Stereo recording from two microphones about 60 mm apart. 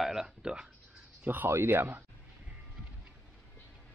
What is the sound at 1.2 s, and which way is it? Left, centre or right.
Speech, right.